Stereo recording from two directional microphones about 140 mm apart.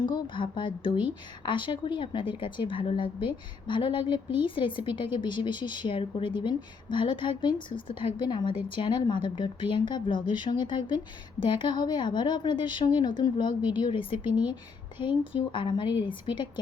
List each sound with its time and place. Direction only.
0.0 s speech: 35° left (ahead or behind)